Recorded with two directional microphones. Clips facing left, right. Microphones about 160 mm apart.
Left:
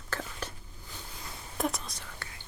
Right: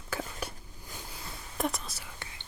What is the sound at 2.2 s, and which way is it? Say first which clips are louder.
Whispering: right 1 dB; 20° right (ahead or behind).